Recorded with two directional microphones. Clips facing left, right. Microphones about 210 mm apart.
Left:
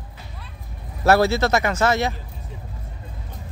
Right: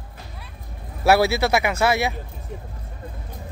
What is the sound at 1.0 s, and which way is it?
Speech, 10° right (ahead or behind).